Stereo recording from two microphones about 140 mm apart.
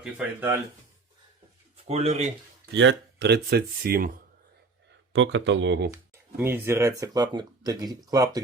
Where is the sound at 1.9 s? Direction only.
50° right (ahead or behind).